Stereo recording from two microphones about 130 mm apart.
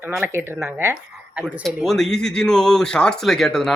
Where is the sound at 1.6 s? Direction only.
Centre (ahead or behind).